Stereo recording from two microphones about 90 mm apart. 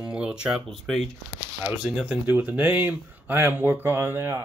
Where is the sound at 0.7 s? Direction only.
Centre (ahead or behind).